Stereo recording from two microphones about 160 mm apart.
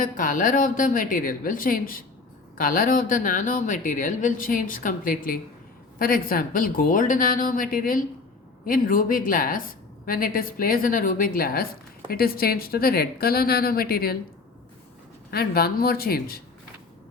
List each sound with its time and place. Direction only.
0.0 s a woman's voice: 60° left (ahead or behind)
15.3 s a woman's voice: 75° left (ahead or behind)